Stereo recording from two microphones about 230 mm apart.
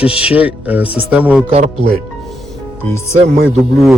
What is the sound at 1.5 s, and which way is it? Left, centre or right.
Speech, right.